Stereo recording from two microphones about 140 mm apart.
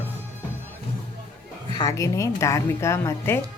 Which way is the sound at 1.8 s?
25° left (ahead or behind).